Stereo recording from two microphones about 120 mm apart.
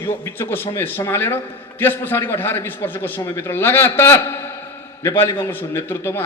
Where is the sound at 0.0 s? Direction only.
20° left (ahead or behind).